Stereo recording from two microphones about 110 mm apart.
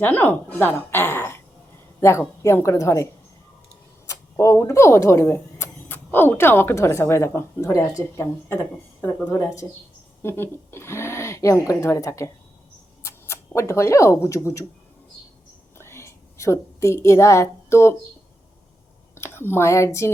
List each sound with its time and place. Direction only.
0.0 s speech: 15° left (ahead or behind)
0.8 s a sound: 20° left (ahead or behind)
2.0 s a woman's voice: 25° left (ahead or behind)
15.8 s whispering: 25° left (ahead or behind)
19.1 s speech: 20° left (ahead or behind)